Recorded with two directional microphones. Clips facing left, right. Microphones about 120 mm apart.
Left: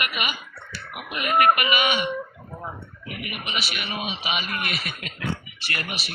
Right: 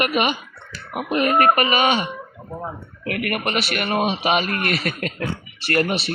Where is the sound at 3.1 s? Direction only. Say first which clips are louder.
Right 10 dB; 65° right (ahead or behind); by 5.3 s 45° right (ahead or behind).